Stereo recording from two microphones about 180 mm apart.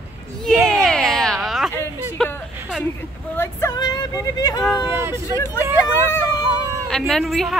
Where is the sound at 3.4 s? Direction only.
15° left (ahead or behind).